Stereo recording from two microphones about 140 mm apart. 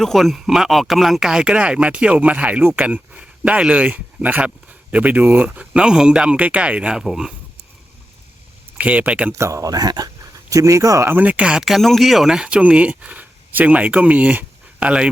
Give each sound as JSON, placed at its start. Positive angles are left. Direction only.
{"t": 0.0, "sound": "speech", "side_deg": 0}
{"t": 8.8, "sound": "speech", "side_deg": -10}
{"t": 9.3, "sound": "speech", "side_deg": -20}